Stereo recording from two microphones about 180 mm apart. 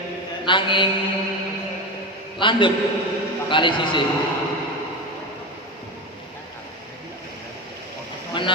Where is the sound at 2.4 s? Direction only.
25° left (ahead or behind).